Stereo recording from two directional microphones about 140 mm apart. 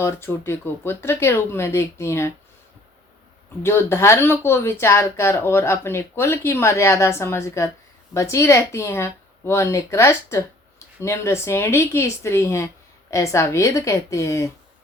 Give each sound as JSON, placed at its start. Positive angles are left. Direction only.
{"t": 0.0, "sound": "speech", "side_deg": 20}
{"t": 3.6, "sound": "speech", "side_deg": 15}